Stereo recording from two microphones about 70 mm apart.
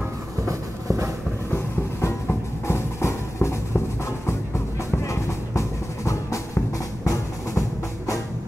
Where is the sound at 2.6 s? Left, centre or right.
Left.